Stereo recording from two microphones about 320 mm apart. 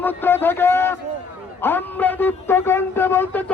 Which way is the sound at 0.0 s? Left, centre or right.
Centre.